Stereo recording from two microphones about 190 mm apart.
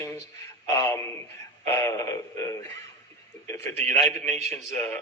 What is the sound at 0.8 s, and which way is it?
A man's voice, 15° left (ahead or behind).